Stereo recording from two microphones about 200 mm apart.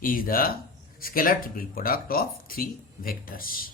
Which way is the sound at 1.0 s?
45° left (ahead or behind).